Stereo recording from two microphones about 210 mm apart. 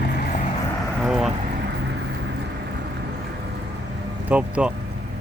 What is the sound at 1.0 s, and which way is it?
Vehicle, centre (ahead or behind).